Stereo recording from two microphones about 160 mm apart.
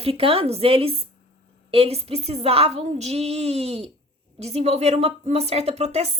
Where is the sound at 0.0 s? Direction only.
35° right (ahead or behind).